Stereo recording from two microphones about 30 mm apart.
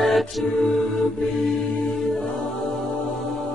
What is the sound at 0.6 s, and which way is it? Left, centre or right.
Music, centre.